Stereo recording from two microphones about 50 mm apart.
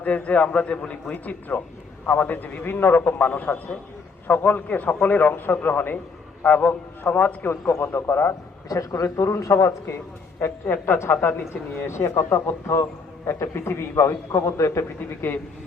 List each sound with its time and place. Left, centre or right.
0.0 s a man's voice: left
3.2 s a man's voice: left
7.7 s speech: left
9.2 s speech: left
10.4 s a man's voice: left
11.9 s a man's voice: left